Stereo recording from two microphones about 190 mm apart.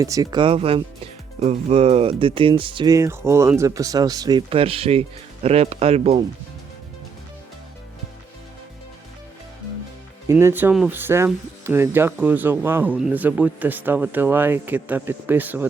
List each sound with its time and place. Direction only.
0.0 s speech: 20° right (ahead or behind)
10.2 s speech: 10° right (ahead or behind)